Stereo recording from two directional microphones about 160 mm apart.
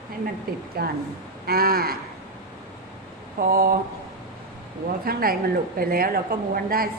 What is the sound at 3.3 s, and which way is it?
Speech, 60° right (ahead or behind).